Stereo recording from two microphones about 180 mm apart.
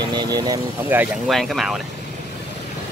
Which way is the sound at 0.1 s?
25° right (ahead or behind).